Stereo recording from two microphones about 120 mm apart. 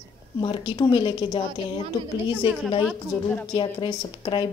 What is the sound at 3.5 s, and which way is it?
A woman's voice, 40° left (ahead or behind).